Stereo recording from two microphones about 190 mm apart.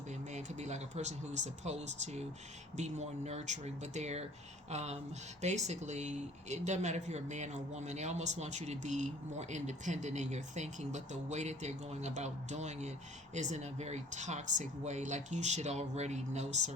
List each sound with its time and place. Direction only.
0.1 s speech: 40° right (ahead or behind)